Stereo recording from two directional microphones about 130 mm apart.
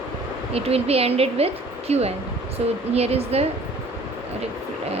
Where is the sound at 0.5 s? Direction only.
50° right (ahead or behind).